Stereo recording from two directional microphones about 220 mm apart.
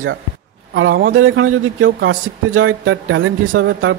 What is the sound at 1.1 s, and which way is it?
Speech, 65° right (ahead or behind).